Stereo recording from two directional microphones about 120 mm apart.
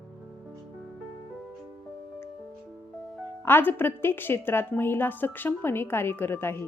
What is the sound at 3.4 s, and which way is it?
A woman's voice, 20° left (ahead or behind).